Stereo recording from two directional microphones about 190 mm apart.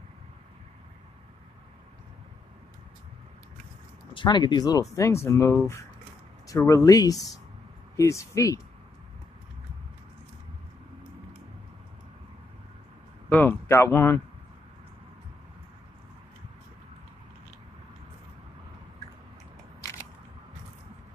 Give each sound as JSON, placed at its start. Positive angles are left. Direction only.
{"t": 4.1, "sound": "speech", "side_deg": 25}
{"t": 13.3, "sound": "speech", "side_deg": 10}